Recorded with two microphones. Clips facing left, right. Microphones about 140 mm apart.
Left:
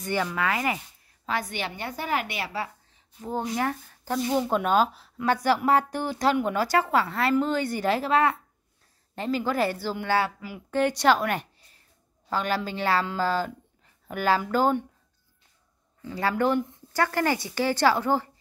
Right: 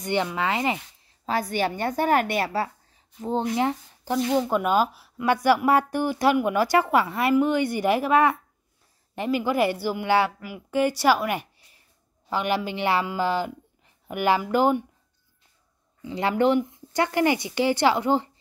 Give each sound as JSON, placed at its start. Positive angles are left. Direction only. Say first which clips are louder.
{"t": 0.0, "sound": "speech", "louder": "right 2 dB", "side_deg": -20}
{"t": 1.2, "sound": "a woman's voice", "louder": "right 5 dB", "side_deg": -35}
{"t": 3.2, "sound": "speech", "louder": "right 4 dB", "side_deg": -25}
{"t": 4.4, "sound": "a woman's voice", "louder": "left 1 dB", "side_deg": -5}
{"t": 16.0, "sound": "speech", "louder": "right 3 dB", "side_deg": -20}